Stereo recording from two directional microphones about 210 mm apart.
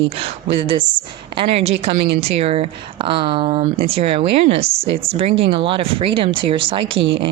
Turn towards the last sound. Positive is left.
turn(degrees=-25)  # may be behind; listen again after turning